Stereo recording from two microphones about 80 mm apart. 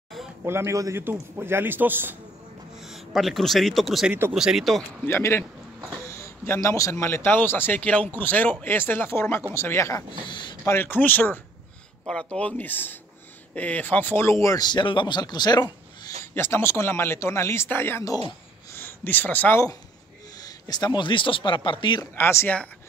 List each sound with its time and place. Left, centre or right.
0.4 s a man's voice: right
2.8 s a man's voice: centre
5.0 s a man's voice: left
10.2 s speech: left
10.6 s a man's voice: left
12.1 s a man's voice: centre; by 14.6 s left
14.6 s speech: left
16.3 s a man's voice: left
18.7 s a sound: left
19.5 s speech: left
22.1 s speech: left